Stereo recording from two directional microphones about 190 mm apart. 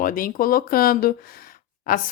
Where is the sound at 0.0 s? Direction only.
45° left (ahead or behind).